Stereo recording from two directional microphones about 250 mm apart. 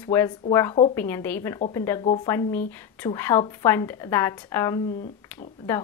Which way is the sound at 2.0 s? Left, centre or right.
Left.